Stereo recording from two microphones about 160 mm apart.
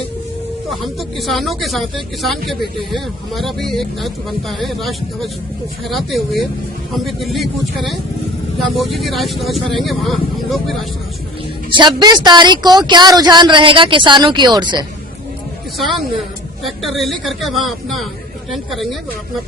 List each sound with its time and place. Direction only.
0.7 s speech: centre (ahead or behind)
11.7 s speech: 30° right (ahead or behind)
15.8 s speech: centre (ahead or behind)